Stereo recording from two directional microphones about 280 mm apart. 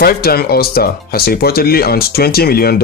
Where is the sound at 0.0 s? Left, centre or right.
Left.